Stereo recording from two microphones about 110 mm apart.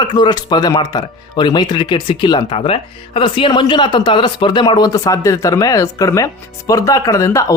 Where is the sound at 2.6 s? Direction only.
55° left (ahead or behind).